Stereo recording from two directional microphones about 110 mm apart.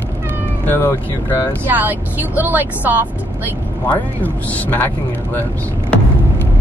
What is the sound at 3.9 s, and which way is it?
Speech, 15° left (ahead or behind).